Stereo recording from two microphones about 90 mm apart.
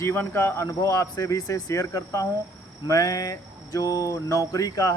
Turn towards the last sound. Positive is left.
turn(degrees=45)  # may be behind; listen again after turning